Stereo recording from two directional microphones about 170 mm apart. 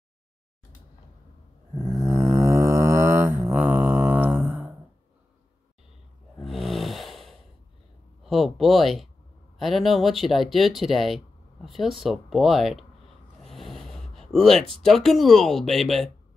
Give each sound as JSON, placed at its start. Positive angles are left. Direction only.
{"t": 1.8, "sound": "a sound", "side_deg": -15}
{"t": 3.3, "sound": "music", "side_deg": -10}
{"t": 6.4, "sound": "snoring", "side_deg": 0}
{"t": 8.3, "sound": "speech", "side_deg": 0}